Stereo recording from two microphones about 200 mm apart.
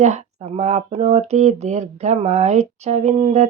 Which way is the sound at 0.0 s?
35° right (ahead or behind).